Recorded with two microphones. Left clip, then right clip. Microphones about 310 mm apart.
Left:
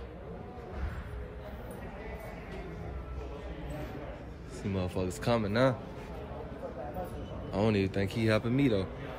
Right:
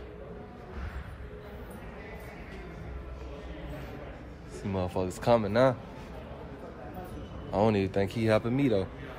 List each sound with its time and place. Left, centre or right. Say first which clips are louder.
4.6 s speech: right 3 dB; centre
7.5 s speech: right 4 dB; centre